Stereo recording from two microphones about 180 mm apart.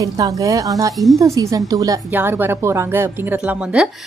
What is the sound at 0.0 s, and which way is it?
A woman's voice, 20° right (ahead or behind).